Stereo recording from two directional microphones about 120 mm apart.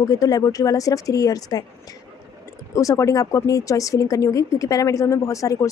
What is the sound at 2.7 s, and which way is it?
Speech, 25° left (ahead or behind).